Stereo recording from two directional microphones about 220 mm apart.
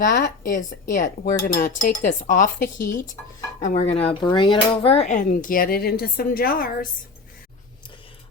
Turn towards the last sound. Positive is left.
turn(degrees=40)  # may be behind; listen again after turning